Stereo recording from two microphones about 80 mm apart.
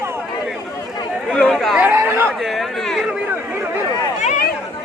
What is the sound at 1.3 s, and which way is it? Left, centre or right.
Speech, centre.